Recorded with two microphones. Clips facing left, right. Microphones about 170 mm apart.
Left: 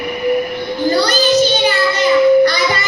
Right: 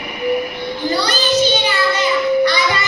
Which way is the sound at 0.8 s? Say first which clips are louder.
Left 5 dB; 40° left (ahead or behind).